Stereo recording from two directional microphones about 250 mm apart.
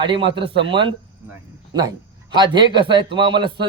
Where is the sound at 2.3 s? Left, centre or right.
Centre.